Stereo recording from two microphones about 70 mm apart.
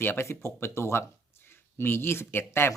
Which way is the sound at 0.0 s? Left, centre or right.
Left.